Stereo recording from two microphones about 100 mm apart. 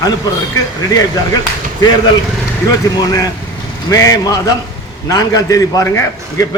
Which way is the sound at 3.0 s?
40° left (ahead or behind).